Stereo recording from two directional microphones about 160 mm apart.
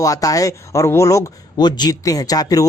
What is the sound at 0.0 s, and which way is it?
Speech, 20° left (ahead or behind).